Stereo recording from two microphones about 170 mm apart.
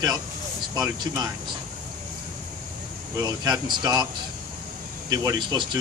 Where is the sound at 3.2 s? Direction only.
25° right (ahead or behind).